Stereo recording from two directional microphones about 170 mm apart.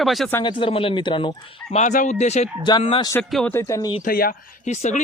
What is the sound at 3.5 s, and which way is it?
Speech, 15° left (ahead or behind).